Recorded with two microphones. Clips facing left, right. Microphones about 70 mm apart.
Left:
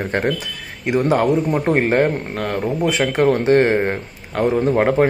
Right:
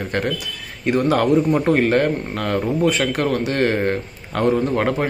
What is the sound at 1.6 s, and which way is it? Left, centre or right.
Speech, left.